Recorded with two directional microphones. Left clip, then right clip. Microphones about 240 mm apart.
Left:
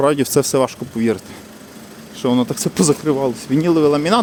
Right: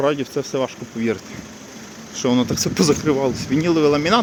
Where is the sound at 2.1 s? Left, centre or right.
Centre.